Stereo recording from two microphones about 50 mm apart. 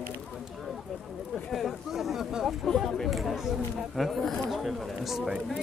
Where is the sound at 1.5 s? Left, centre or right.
Centre.